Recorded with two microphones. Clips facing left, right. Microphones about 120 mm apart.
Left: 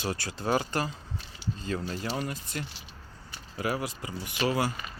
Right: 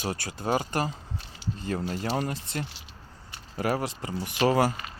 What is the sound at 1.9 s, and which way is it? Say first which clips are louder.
Speech: right 4 dB; 35° right (ahead or behind).